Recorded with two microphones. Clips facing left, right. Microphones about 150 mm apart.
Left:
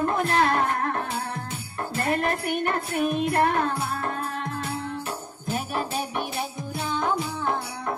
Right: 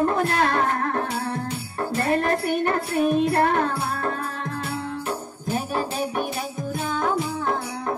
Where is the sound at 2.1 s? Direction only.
35° right (ahead or behind).